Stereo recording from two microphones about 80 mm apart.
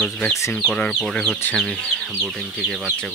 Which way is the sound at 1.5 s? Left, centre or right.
Centre.